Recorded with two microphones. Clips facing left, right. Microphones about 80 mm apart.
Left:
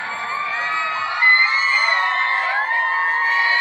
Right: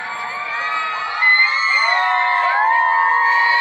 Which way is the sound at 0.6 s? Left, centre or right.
Centre.